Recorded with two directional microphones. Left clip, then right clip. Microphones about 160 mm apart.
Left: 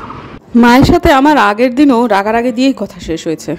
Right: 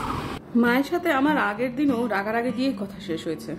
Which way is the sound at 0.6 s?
55° left (ahead or behind).